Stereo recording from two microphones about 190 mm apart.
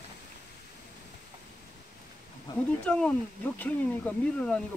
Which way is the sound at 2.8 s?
5° left (ahead or behind).